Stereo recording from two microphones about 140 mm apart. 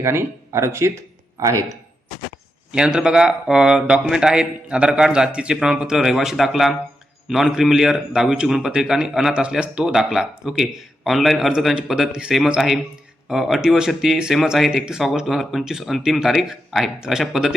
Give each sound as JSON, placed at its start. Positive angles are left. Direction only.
{"t": 0.0, "sound": "speech", "side_deg": -20}
{"t": 2.7, "sound": "a man's voice", "side_deg": -5}